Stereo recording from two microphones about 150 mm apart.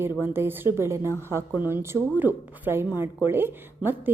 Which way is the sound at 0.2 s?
15° right (ahead or behind).